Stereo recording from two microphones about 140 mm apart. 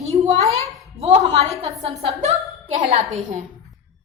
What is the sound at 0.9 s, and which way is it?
A woman's voice, 50° right (ahead or behind).